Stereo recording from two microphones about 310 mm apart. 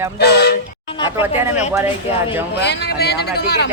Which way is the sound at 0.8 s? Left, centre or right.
Centre.